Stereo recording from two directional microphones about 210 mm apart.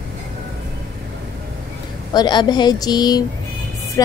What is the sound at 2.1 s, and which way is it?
Speech, 20° left (ahead or behind).